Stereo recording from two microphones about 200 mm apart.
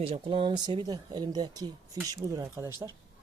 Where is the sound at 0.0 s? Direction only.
30° right (ahead or behind).